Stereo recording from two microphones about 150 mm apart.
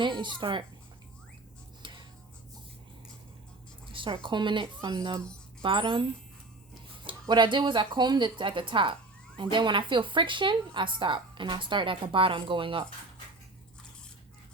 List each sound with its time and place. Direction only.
0.0 s speech: 30° right (ahead or behind)
1.8 s tick-tock: 30° right (ahead or behind)
3.9 s speech: 35° right (ahead or behind)
7.1 s speech: 30° right (ahead or behind)